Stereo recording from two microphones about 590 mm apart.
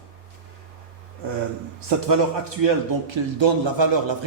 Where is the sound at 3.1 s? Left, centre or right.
Right.